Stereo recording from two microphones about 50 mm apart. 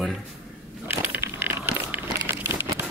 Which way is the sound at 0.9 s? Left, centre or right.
Right.